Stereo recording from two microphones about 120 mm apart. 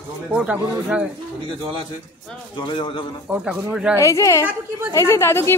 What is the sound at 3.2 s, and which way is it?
Speech, 10° right (ahead or behind).